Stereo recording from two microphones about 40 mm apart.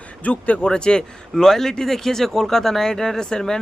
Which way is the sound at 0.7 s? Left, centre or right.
Left.